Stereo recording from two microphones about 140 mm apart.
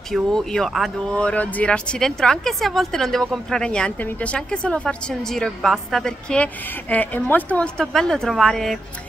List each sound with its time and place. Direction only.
0.1 s speech: 5° left (ahead or behind)